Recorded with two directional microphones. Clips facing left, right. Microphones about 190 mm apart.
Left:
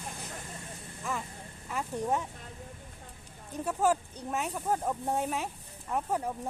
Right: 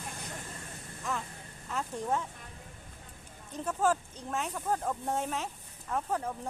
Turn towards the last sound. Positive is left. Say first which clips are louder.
# left 1 dB
turn(degrees=15)  # may be behind; listen again after turning